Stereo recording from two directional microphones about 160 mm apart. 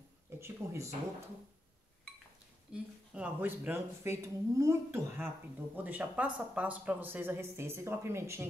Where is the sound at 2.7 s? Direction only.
10° right (ahead or behind).